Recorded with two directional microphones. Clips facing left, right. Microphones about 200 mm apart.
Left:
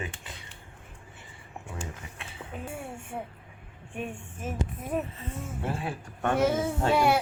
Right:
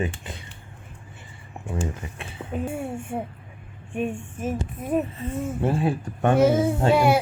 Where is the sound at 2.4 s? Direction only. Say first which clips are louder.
Right 9 dB; 35° right (ahead or behind).